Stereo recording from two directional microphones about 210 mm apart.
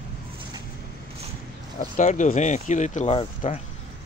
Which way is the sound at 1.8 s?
35° left (ahead or behind).